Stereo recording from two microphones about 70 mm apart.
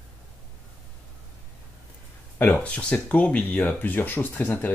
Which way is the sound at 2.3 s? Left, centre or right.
Left.